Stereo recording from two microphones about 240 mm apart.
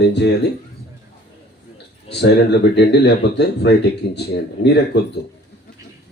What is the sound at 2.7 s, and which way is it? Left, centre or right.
Speech, left.